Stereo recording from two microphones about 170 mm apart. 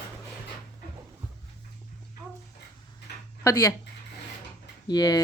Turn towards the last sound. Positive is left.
turn(degrees=20)  # may be behind; listen again after turning